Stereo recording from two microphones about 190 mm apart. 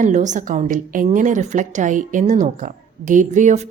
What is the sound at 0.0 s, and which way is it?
A woman's voice, 40° right (ahead or behind).